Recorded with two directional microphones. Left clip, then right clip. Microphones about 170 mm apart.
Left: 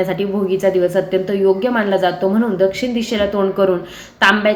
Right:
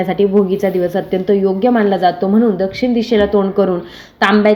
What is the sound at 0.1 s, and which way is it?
A woman's voice, 45° right (ahead or behind).